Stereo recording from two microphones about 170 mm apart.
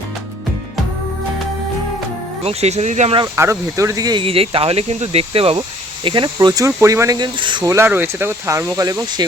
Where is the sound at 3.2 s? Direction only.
15° right (ahead or behind).